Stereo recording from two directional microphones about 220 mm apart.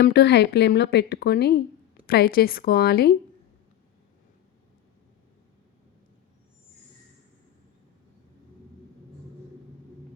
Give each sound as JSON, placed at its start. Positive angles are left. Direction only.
{"t": 0.0, "sound": "speech", "side_deg": 50}